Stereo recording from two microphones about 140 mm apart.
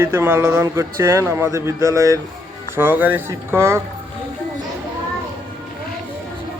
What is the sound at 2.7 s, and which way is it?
Speech, 15° right (ahead or behind).